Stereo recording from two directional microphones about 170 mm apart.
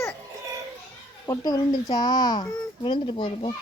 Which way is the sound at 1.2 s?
20° left (ahead or behind).